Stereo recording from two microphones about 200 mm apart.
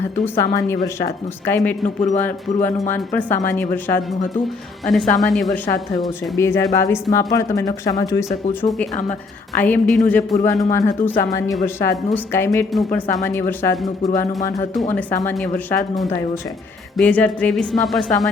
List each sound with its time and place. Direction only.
0.3 s speech: 15° left (ahead or behind)
2.0 s speech: 35° left (ahead or behind)
2.9 s speech: 10° left (ahead or behind)
6.3 s speech: 15° left (ahead or behind)
9.6 s speech: 10° left (ahead or behind)
10.4 s speech: 15° left (ahead or behind)
15.4 s speech: centre (ahead or behind)